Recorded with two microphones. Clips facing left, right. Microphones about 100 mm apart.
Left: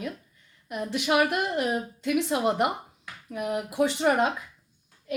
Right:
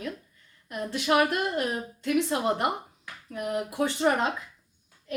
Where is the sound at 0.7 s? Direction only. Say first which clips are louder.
Even; 20° left (ahead or behind).